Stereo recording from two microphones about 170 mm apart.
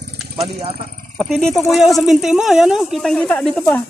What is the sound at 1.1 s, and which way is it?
Speech, centre (ahead or behind).